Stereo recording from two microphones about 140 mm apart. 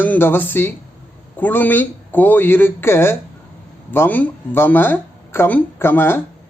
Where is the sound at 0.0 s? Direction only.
15° left (ahead or behind).